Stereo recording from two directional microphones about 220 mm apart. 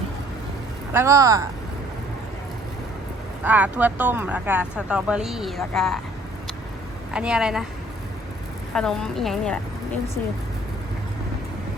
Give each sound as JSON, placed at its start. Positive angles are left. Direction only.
{"t": 0.9, "sound": "speech", "side_deg": -15}
{"t": 3.4, "sound": "speech", "side_deg": -5}
{"t": 7.1, "sound": "a woman's voice", "side_deg": -5}
{"t": 8.7, "sound": "a woman's voice", "side_deg": 5}